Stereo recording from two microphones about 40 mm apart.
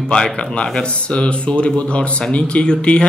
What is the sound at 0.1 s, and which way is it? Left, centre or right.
Speech, left.